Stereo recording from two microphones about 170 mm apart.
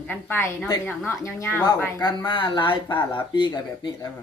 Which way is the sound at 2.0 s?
25° left (ahead or behind).